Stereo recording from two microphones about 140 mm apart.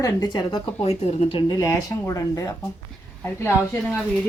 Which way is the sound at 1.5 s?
25° left (ahead or behind).